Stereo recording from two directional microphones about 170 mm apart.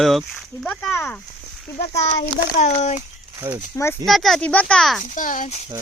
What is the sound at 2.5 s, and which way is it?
Speech, 45° left (ahead or behind).